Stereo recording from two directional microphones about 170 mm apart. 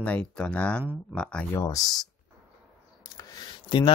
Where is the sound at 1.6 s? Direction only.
20° left (ahead or behind).